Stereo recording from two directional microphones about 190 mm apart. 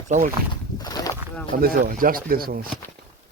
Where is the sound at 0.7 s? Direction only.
20° left (ahead or behind).